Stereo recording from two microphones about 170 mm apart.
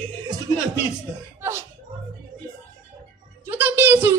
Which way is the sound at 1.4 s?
15° right (ahead or behind).